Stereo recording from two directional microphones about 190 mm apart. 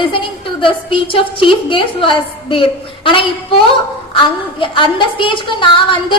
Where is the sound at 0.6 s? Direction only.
25° left (ahead or behind).